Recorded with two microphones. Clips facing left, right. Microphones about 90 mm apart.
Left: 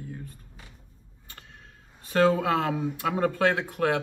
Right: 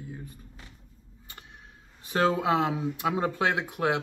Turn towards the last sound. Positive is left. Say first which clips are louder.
# left 2 dB
turn(degrees=-15)  # may be behind; listen again after turning